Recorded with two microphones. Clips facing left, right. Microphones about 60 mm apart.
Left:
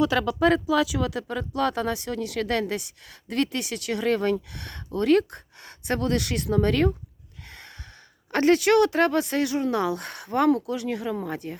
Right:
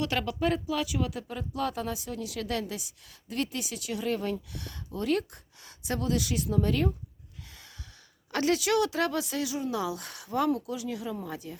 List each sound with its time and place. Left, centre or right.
0.4 s speech: left
7.4 s a sound: left
8.3 s speech: left